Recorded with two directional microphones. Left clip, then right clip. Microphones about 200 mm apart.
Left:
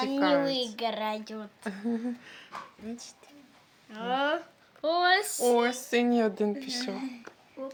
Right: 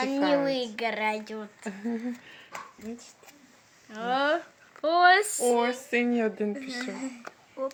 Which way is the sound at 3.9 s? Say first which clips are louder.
Right 3 dB; 20° right (ahead or behind).